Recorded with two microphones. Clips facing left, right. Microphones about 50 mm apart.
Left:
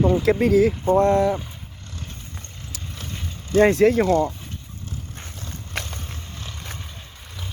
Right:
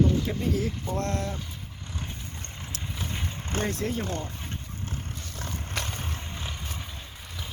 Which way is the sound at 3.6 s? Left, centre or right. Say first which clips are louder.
Left 15 dB; left.